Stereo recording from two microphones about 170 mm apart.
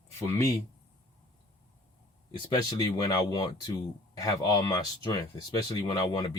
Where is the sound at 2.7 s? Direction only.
25° left (ahead or behind).